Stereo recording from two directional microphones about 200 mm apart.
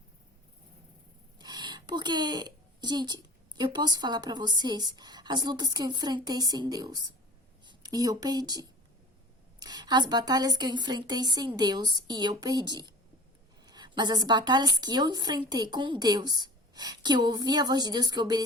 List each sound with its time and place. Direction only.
1.4 s a woman's voice: 20° right (ahead or behind)